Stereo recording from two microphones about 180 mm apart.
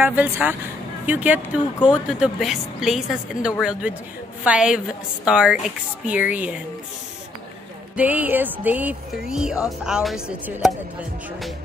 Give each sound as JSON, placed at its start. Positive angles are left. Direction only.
{"t": 0.0, "sound": "speech", "side_deg": -10}
{"t": 7.9, "sound": "speech", "side_deg": -10}